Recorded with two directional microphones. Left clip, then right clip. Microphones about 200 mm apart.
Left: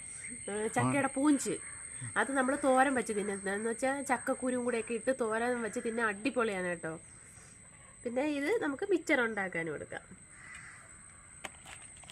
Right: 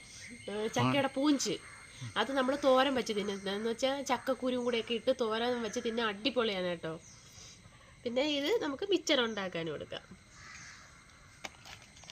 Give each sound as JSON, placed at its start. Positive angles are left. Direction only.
{"t": 0.6, "sound": "a woman's voice", "side_deg": 5}
{"t": 8.0, "sound": "a woman's voice", "side_deg": 10}